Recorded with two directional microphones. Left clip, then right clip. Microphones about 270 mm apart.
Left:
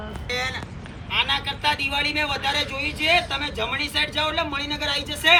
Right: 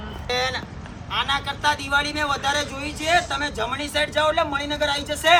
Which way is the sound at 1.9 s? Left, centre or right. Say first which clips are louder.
Right 1 dB; centre.